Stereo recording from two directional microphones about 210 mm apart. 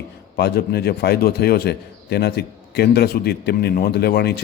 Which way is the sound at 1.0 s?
50° left (ahead or behind).